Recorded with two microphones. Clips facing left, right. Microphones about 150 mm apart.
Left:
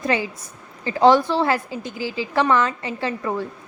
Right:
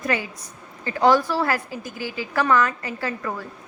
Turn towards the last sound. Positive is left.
turn(degrees=25)  # may be behind; listen again after turning